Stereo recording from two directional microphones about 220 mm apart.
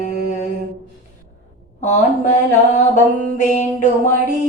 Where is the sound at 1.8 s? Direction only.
35° left (ahead or behind).